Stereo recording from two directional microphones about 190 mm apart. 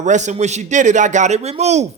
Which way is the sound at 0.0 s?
40° right (ahead or behind).